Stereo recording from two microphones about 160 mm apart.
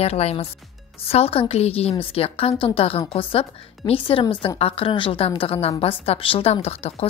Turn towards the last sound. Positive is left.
turn(degrees=40)  # may be behind; listen again after turning